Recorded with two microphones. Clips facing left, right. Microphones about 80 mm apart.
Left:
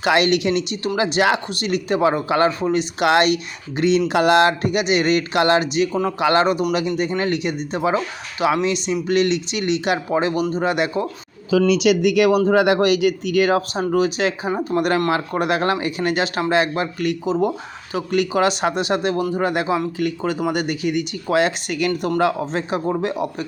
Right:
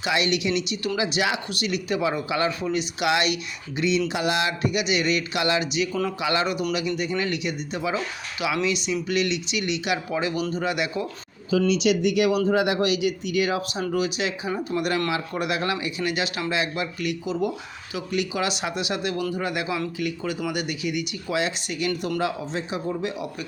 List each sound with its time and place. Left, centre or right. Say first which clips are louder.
0.0 s speech: left 7 dB; left
6.4 s speech: left 6 dB; left
11.5 s speech: left 5 dB; left